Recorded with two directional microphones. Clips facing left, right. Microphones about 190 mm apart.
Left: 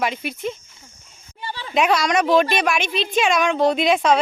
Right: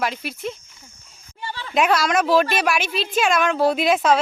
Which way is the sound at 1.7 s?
5° right (ahead or behind).